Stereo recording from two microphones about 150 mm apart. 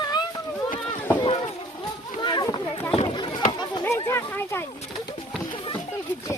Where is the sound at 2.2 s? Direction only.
30° left (ahead or behind).